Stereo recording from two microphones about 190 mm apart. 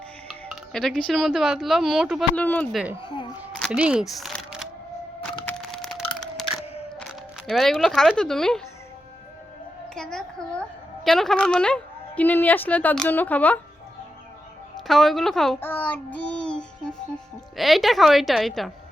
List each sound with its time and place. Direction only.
0.3 s speech: centre (ahead or behind)
2.3 s a woman's voice: 10° left (ahead or behind)
3.0 s speech: 25° left (ahead or behind)
3.6 s speech: 5° right (ahead or behind)
5.5 s a sound: 5° left (ahead or behind)
7.4 s speech: centre (ahead or behind)
9.9 s a woman's voice: 5° left (ahead or behind)
14.8 s a child's voice: centre (ahead or behind)